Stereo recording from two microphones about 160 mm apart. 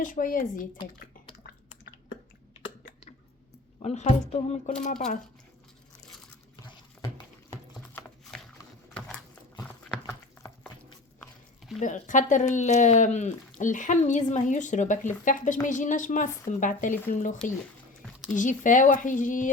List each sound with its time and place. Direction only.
0.0 s speech: 55° left (ahead or behind)
3.8 s a woman's voice: 40° left (ahead or behind)
11.8 s speech: 50° left (ahead or behind)